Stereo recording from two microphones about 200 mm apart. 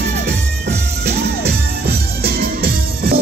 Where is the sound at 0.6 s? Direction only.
55° right (ahead or behind).